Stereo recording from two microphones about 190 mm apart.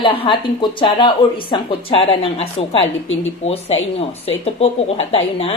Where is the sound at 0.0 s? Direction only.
25° left (ahead or behind).